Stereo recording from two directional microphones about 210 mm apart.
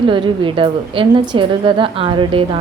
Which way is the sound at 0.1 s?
25° right (ahead or behind).